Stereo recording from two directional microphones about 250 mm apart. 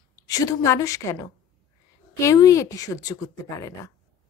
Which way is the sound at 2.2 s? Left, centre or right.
Centre.